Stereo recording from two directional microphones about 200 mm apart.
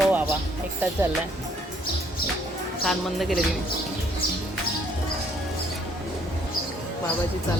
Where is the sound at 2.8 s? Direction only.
Centre (ahead or behind).